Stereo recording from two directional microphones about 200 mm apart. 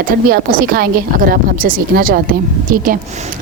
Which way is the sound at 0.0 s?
45° right (ahead or behind).